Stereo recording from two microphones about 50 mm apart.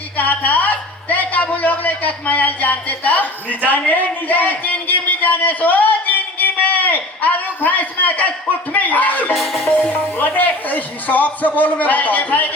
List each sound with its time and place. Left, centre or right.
0.2 s a man's voice: left
9.3 s music: centre
9.9 s speech: left